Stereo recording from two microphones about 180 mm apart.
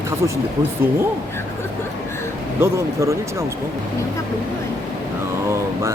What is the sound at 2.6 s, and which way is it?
Speech, 15° right (ahead or behind).